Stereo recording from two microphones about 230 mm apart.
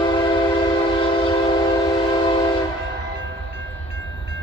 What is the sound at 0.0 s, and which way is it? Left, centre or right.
Train, left.